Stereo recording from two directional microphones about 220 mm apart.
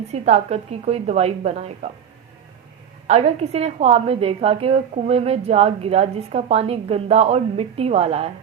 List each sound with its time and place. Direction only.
0.1 s a woman's voice: 30° right (ahead or behind)
3.1 s a woman's voice: 30° right (ahead or behind)